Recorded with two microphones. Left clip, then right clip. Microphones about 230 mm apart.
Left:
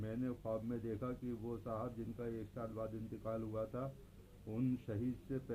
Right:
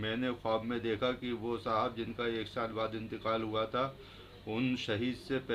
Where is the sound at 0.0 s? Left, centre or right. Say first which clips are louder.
Right 9 dB; centre.